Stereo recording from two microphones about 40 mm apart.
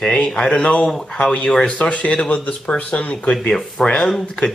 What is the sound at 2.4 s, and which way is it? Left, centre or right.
Speech, left.